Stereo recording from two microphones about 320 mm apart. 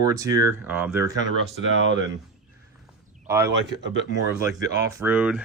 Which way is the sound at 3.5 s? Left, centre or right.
Right.